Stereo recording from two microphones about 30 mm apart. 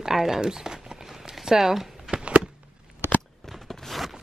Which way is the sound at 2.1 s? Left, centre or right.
Right.